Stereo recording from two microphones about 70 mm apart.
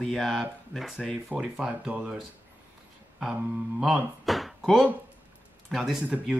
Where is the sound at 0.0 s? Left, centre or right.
Centre.